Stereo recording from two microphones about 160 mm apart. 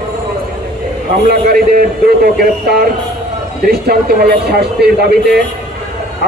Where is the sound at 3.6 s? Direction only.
75° right (ahead or behind).